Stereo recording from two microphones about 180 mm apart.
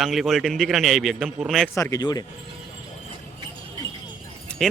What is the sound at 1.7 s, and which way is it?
Speech, 20° left (ahead or behind).